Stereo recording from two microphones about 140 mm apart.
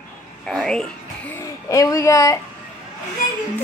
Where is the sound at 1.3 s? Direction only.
20° left (ahead or behind).